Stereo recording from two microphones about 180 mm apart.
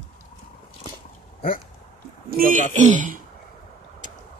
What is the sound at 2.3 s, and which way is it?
Speech, 50° right (ahead or behind).